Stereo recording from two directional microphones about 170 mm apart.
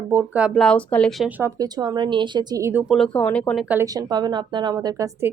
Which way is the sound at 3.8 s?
20° right (ahead or behind).